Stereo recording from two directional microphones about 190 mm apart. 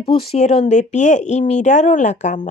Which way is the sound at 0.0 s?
30° left (ahead or behind).